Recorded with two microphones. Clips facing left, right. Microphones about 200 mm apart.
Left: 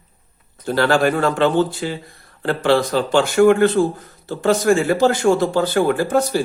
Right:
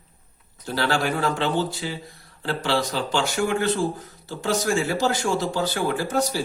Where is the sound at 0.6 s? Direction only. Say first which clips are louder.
Left 8 dB; 55° left (ahead or behind).